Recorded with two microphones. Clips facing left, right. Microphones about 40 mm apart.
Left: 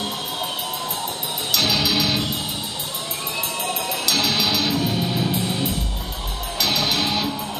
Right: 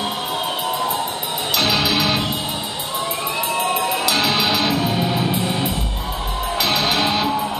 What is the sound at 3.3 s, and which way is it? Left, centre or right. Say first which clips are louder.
Music: right 5 dB; centre.